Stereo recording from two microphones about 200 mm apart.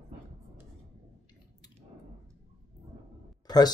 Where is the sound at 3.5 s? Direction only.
20° left (ahead or behind).